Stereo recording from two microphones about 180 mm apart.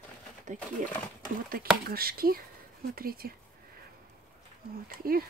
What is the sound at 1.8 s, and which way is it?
Speech, 55° right (ahead or behind).